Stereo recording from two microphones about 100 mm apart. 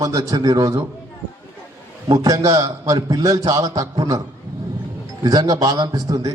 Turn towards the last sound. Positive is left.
turn(degrees=-35)  # may be behind; listen again after turning